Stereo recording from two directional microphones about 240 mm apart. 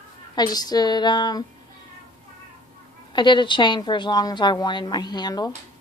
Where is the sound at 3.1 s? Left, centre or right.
Centre.